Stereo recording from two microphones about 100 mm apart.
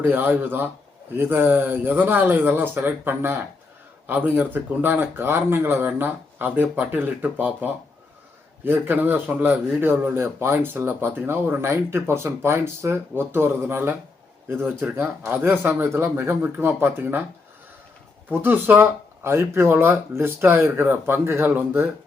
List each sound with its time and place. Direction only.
0.0 s a man's voice: 20° right (ahead or behind)
18.4 s a man's voice: 20° right (ahead or behind)